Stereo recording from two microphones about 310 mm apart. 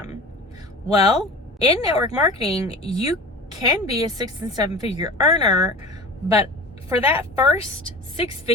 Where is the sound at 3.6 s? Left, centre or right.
Centre.